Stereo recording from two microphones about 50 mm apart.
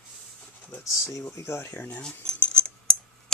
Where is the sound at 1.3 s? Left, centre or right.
Left.